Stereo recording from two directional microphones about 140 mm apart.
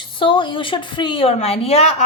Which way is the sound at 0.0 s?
35° left (ahead or behind).